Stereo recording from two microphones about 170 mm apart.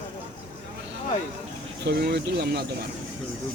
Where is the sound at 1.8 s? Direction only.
75° right (ahead or behind).